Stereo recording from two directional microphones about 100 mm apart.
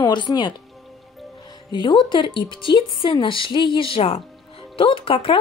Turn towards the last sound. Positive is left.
turn(degrees=65)  # may be behind; listen again after turning